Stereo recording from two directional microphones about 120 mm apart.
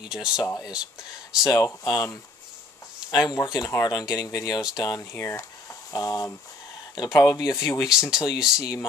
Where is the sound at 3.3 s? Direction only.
35° left (ahead or behind).